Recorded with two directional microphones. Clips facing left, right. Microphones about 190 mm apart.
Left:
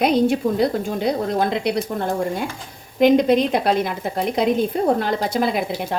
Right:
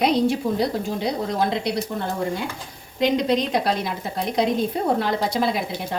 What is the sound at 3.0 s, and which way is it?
A woman's voice, 50° left (ahead or behind).